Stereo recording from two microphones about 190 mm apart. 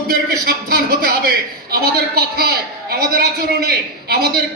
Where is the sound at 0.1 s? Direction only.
50° right (ahead or behind).